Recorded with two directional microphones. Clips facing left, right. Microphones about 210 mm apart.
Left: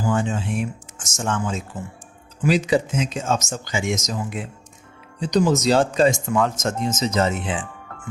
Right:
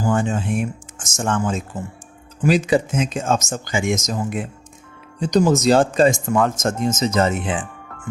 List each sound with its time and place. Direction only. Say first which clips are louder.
0.0 s speech: right 2 dB; 50° right (ahead or behind)